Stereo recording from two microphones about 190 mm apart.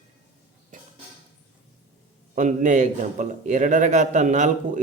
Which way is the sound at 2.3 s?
40° right (ahead or behind).